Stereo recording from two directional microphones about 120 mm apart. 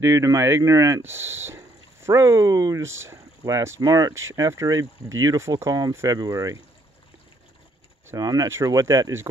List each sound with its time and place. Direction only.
0.0 s speech: 25° right (ahead or behind)
8.1 s speech: 30° right (ahead or behind)